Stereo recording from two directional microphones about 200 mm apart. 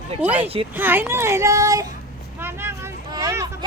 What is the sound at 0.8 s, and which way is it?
Speech, 10° right (ahead or behind).